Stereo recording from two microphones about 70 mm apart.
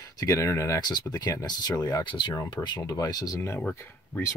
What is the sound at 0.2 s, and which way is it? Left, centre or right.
Speech, left.